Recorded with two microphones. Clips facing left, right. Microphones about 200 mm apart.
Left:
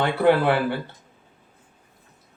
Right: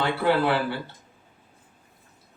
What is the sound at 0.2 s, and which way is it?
Speech, 55° left (ahead or behind).